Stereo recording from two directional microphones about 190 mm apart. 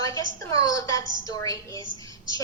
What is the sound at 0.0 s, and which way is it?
A woman's voice, 20° left (ahead or behind).